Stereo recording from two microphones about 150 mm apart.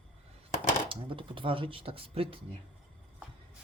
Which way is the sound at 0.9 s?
35° right (ahead or behind).